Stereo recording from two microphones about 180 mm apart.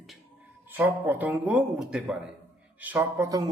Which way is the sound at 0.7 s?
10° right (ahead or behind).